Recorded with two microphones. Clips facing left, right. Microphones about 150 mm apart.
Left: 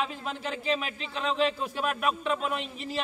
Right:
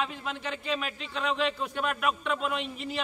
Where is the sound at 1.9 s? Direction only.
35° left (ahead or behind).